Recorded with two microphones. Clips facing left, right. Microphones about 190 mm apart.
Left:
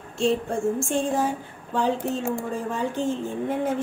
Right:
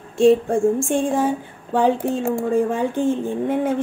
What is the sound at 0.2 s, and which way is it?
Speech, 55° right (ahead or behind).